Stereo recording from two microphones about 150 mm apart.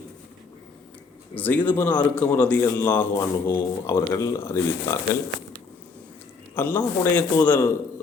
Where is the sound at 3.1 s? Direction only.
25° left (ahead or behind).